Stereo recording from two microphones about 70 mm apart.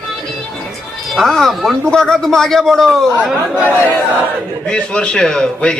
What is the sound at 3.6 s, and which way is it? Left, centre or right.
Speech, right.